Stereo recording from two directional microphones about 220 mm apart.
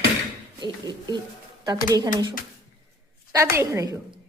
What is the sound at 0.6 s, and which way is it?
A woman's voice, 20° right (ahead or behind).